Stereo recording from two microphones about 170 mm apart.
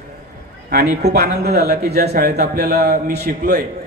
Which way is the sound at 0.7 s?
70° right (ahead or behind).